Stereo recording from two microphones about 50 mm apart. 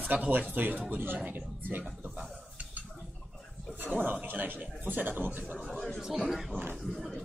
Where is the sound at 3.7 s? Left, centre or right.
Right.